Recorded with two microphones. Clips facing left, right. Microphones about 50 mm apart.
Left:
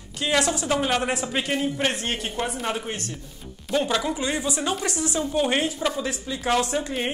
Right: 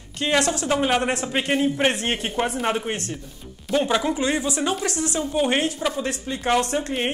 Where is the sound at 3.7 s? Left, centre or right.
Centre.